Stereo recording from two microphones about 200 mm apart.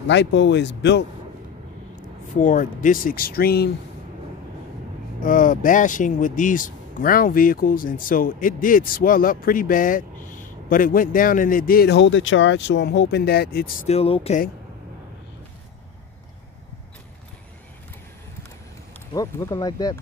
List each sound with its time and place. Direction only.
0.1 s speech: 60° left (ahead or behind)
2.4 s speech: 40° left (ahead or behind)
5.2 s speech: 40° left (ahead or behind)
13.8 s speech: 30° left (ahead or behind)
19.1 s speech: 20° left (ahead or behind)